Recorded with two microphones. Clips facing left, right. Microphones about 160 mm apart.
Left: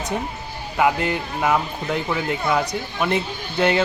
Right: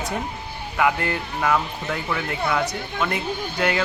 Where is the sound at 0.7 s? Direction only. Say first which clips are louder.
Left 2 dB; 20° left (ahead or behind).